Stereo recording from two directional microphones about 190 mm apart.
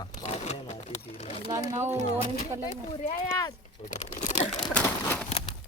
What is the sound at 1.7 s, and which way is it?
Speech, 15° right (ahead or behind).